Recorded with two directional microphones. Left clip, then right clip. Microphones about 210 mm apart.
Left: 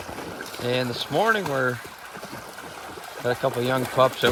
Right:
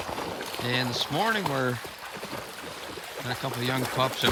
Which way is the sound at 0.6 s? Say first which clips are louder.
Left 3 dB; 10° right (ahead or behind).